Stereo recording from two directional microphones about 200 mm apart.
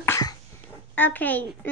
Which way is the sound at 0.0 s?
15° left (ahead or behind).